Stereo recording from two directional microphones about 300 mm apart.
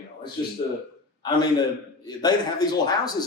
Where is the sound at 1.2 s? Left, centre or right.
Centre.